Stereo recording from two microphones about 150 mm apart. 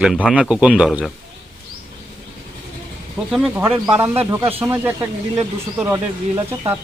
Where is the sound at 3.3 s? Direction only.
Centre (ahead or behind).